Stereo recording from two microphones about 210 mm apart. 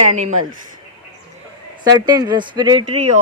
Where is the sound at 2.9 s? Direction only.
35° right (ahead or behind).